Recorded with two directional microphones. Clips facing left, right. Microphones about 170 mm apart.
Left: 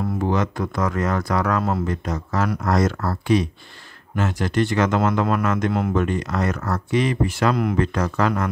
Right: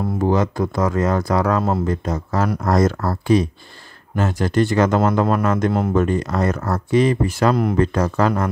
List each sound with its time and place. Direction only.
0.2 s speech: 35° right (ahead or behind)